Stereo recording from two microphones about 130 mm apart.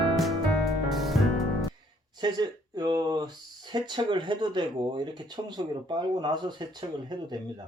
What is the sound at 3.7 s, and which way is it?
Speech, 35° right (ahead or behind).